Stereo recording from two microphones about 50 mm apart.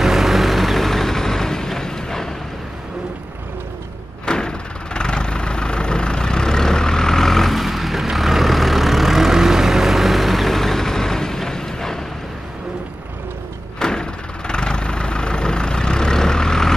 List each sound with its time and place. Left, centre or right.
0.0 s vehicle: centre
4.3 s vehicle: centre
13.7 s door: centre
14.5 s vehicle: centre